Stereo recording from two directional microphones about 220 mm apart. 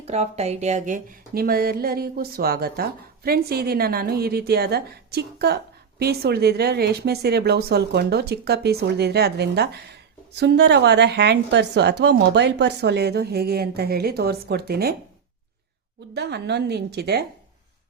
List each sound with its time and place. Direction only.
0.0 s speech: 30° right (ahead or behind); by 14.9 s 45° right (ahead or behind)
16.1 s speech: 50° right (ahead or behind)